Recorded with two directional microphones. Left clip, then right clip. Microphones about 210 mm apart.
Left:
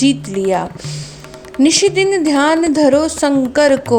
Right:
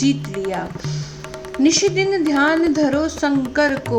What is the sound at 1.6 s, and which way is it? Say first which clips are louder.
A woman's voice: left 4 dB; 40° left (ahead or behind).